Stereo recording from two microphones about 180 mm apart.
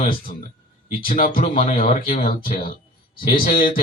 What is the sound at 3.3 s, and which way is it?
Speech, 50° left (ahead or behind).